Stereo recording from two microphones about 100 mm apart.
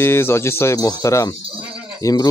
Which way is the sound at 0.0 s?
25° left (ahead or behind).